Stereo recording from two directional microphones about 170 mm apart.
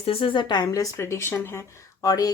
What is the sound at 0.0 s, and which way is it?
Speech, 35° left (ahead or behind).